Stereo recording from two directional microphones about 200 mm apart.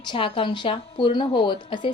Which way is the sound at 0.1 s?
25° left (ahead or behind).